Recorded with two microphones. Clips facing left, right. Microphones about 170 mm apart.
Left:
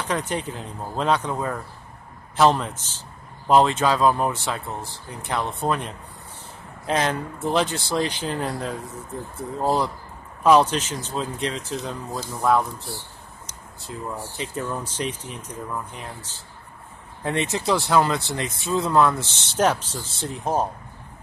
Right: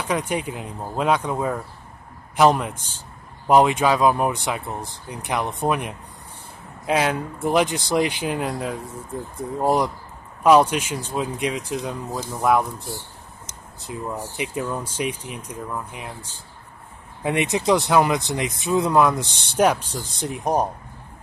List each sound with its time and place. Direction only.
0.0 s speech: 10° right (ahead or behind)